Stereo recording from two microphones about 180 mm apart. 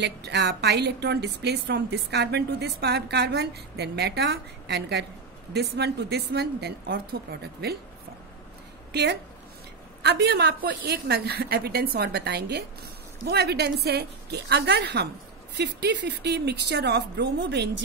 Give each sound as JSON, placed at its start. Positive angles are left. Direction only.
{"t": 0.0, "sound": "a woman's voice", "side_deg": -70}
{"t": 8.9, "sound": "a woman's voice", "side_deg": -70}